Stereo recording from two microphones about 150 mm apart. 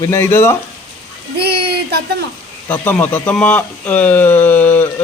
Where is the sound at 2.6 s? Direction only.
15° left (ahead or behind).